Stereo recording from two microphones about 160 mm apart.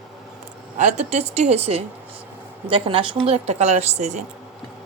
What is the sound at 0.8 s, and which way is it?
A woman's voice, 45° right (ahead or behind).